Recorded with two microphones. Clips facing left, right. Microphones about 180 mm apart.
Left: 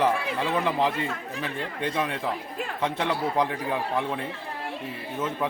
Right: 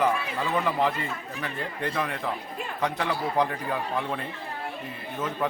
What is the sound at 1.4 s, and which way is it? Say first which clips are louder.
Speech: left 1 dB; 20° left (ahead or behind).